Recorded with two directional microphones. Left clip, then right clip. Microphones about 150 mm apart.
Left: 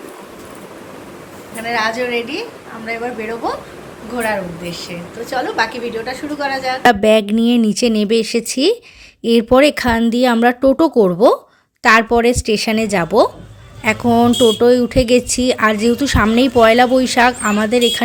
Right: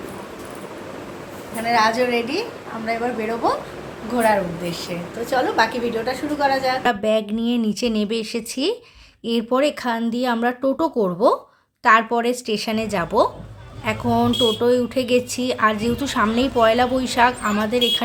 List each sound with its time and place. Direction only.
1.5 s a woman's voice: centre (ahead or behind)
6.8 s speech: 55° left (ahead or behind)